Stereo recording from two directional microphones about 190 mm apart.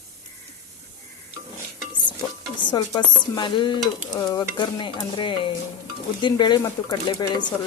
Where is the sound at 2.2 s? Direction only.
15° left (ahead or behind).